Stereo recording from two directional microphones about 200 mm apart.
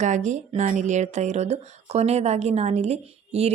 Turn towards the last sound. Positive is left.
turn(degrees=-30)  # may be behind; listen again after turning